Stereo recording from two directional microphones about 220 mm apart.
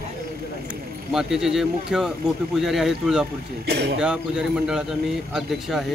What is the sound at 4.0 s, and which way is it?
Speech, 5° right (ahead or behind).